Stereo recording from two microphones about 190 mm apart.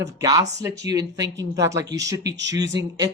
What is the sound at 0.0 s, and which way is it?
Speech, 15° right (ahead or behind).